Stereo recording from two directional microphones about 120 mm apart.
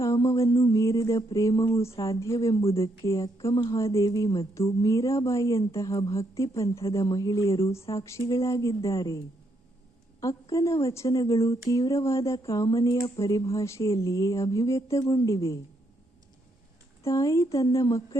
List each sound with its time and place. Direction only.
0.0 s a sound: 25° left (ahead or behind)
1.7 s speech: 25° left (ahead or behind)
17.0 s speech: 25° left (ahead or behind)